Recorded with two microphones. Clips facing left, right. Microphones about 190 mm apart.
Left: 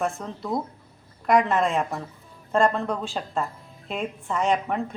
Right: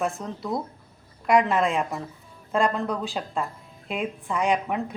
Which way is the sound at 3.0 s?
5° right (ahead or behind).